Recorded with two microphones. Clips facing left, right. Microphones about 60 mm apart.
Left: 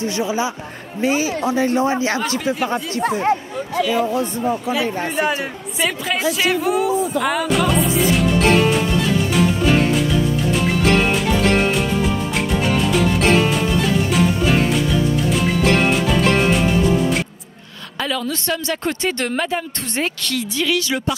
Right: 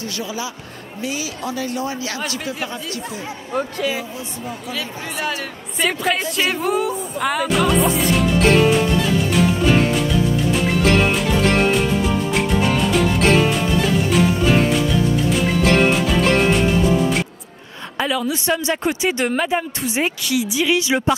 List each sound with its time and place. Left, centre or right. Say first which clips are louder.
0.0 s speech: left 6 dB; left
3.0 s speech: left 11 dB; left
4.6 s speech: left 7 dB; left
5.8 s speech: right 1 dB; centre
7.9 s music: left 1 dB; centre
17.9 s speech: right 2 dB; centre